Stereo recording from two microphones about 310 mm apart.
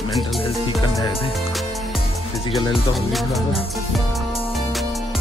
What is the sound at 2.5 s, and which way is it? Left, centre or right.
Speech, centre.